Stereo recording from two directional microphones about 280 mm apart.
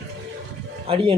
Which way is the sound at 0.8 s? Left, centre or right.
Centre.